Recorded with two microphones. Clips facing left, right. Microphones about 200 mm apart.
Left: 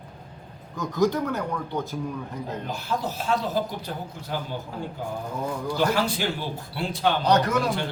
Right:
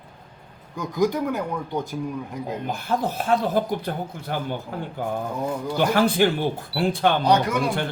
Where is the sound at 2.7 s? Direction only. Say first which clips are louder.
Right 5 dB; 55° right (ahead or behind).